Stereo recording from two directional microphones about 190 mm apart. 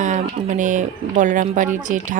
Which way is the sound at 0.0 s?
40° right (ahead or behind).